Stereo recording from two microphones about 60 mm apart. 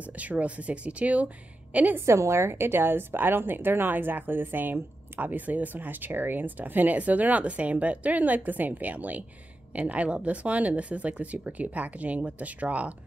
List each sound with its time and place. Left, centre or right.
0.2 s speech: right
2.0 s a woman's voice: right